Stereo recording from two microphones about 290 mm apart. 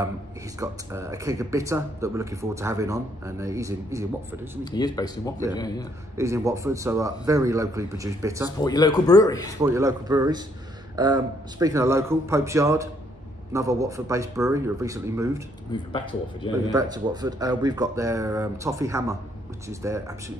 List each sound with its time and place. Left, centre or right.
0.6 s speech: centre
4.6 s speech: centre
6.1 s speech: centre
8.5 s speech: centre
9.6 s speech: centre
15.7 s speech: centre
16.7 s speech: centre